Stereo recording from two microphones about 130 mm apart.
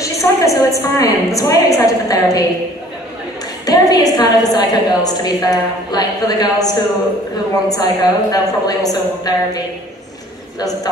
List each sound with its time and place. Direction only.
0.0 s a woman's voice: 25° left (ahead or behind)
3.6 s a woman's voice: 30° left (ahead or behind)